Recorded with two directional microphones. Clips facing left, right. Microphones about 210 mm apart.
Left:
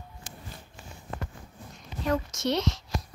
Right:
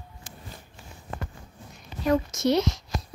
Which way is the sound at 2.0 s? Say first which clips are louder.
Right 5 dB; 10° right (ahead or behind).